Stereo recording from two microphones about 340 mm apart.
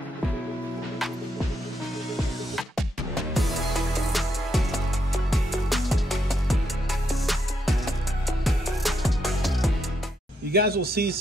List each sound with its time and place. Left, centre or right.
3.3 s music: centre
10.5 s speech: right